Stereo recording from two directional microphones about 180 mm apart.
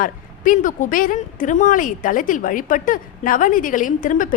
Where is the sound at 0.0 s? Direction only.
45° left (ahead or behind).